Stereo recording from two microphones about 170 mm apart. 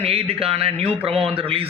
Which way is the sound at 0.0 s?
35° right (ahead or behind).